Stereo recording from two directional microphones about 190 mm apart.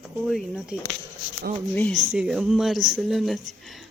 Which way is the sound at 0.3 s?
Centre (ahead or behind).